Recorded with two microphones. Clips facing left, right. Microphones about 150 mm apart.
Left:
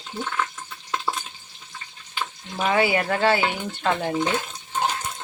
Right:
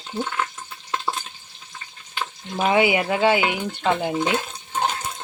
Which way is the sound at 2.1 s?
15° right (ahead or behind).